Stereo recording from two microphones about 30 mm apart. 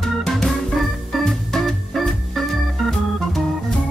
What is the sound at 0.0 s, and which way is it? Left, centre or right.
Organ, centre.